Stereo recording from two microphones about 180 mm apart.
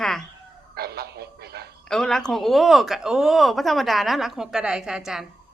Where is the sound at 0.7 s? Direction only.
60° right (ahead or behind).